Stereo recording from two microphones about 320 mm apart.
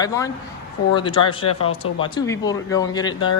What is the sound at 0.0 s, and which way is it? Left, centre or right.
Speech, centre.